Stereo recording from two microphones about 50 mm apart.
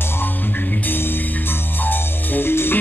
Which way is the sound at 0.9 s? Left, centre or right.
Left.